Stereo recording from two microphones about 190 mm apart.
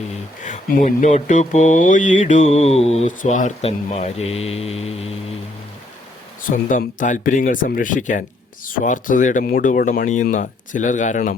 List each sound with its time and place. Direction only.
0.1 s mantra: 40° left (ahead or behind)
6.7 s speech: 40° left (ahead or behind)